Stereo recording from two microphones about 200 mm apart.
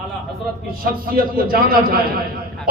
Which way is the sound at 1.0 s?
45° right (ahead or behind).